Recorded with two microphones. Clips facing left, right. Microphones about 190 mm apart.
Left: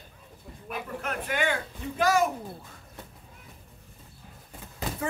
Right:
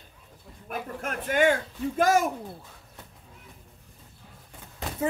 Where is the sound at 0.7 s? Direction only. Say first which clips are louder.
Right 1 dB; 45° right (ahead or behind).